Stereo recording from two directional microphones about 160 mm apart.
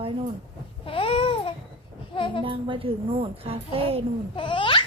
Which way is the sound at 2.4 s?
30° right (ahead or behind).